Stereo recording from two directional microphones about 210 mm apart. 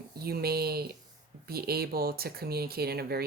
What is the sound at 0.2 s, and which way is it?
Speech, 45° right (ahead or behind).